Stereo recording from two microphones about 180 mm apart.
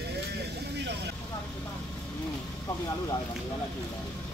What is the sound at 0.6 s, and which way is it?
Vehicle, 70° right (ahead or behind).